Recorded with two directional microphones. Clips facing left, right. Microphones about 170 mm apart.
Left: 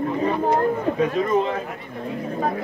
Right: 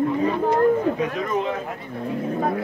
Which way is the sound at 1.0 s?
30° left (ahead or behind).